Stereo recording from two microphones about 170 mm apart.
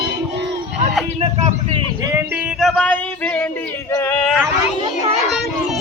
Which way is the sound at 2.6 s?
10° left (ahead or behind).